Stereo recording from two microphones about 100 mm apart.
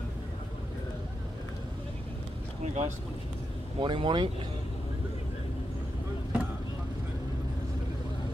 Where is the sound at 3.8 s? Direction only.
50° right (ahead or behind).